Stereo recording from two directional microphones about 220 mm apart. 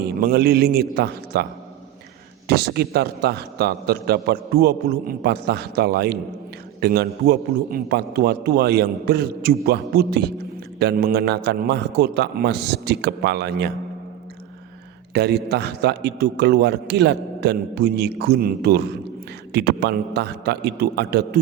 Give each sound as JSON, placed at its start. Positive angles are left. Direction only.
{"t": 0.0, "sound": "a man's voice", "side_deg": -45}
{"t": 2.5, "sound": "a man's voice", "side_deg": -45}
{"t": 15.1, "sound": "a man's voice", "side_deg": -50}